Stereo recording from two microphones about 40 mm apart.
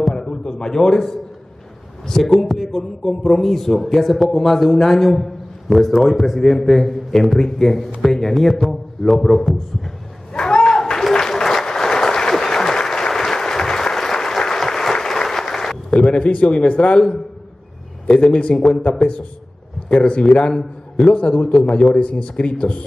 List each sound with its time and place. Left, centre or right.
0.0 s a sound: centre
0.9 s a man's voice: centre
6.4 s a man's voice: centre
10.3 s applause: left
15.9 s a man's voice: left
18.0 s a man's voice: left